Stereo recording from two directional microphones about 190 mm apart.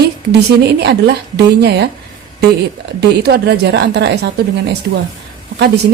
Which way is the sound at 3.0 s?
60° right (ahead or behind).